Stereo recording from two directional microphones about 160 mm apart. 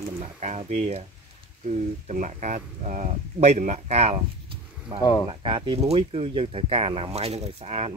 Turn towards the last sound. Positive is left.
turn(degrees=-40)  # may be behind; listen again after turning